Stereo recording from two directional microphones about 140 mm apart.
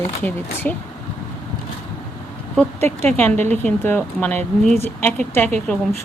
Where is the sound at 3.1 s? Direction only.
15° left (ahead or behind).